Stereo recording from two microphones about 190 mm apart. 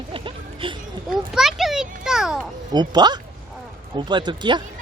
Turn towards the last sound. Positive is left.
turn(degrees=-25)  # may be behind; listen again after turning